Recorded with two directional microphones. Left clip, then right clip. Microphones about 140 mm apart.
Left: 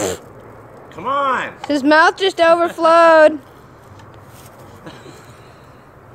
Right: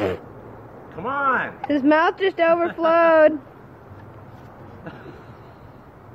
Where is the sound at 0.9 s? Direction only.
10° right (ahead or behind).